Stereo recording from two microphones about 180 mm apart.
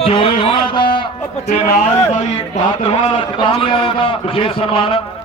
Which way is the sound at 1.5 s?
45° left (ahead or behind).